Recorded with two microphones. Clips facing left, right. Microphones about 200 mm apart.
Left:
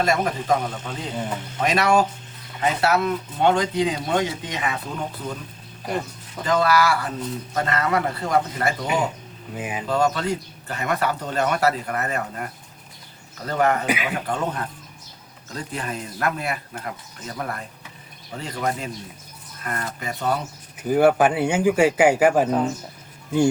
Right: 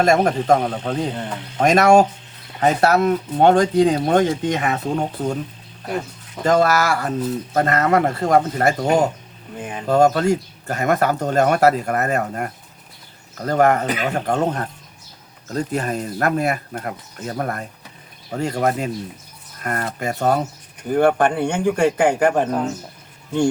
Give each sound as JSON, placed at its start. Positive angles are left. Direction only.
{"t": 0.0, "sound": "speech", "side_deg": -45}
{"t": 6.4, "sound": "speech", "side_deg": -45}
{"t": 9.6, "sound": "a man's voice", "side_deg": 5}
{"t": 9.8, "sound": "speech", "side_deg": -45}
{"t": 20.8, "sound": "a man's voice", "side_deg": 5}